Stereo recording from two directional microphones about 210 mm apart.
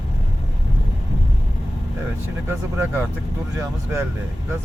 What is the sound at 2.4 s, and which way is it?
Speech, 10° right (ahead or behind).